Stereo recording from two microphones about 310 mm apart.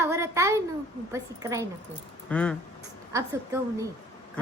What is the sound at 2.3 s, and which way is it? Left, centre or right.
Speech, centre.